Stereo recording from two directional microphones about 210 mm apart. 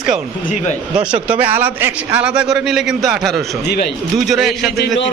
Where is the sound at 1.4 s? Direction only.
10° right (ahead or behind).